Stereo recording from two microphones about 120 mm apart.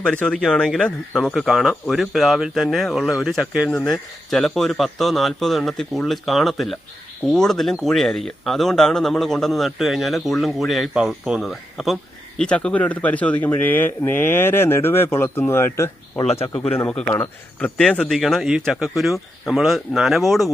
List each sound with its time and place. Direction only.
0.0 s speech: 10° left (ahead or behind)
16.2 s speech: 60° left (ahead or behind)
17.1 s a man's voice: 20° left (ahead or behind)
17.7 s speech: 5° left (ahead or behind)